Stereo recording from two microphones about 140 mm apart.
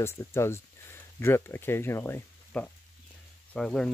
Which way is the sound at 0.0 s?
20° left (ahead or behind).